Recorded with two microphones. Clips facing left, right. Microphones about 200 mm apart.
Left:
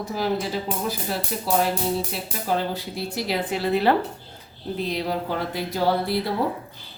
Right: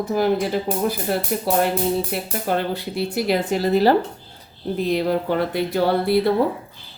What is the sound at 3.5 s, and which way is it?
Speech, 40° right (ahead or behind).